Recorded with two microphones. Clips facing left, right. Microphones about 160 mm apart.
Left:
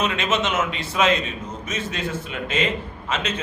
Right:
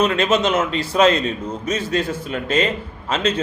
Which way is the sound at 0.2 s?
35° right (ahead or behind).